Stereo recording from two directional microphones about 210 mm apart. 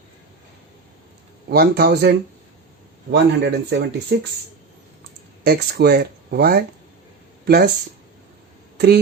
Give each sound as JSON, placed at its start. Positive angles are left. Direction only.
{"t": 1.5, "sound": "speech", "side_deg": -45}
{"t": 5.4, "sound": "speech", "side_deg": -50}